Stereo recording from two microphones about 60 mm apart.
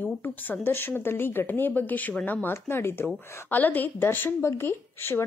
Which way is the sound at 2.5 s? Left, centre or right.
Left.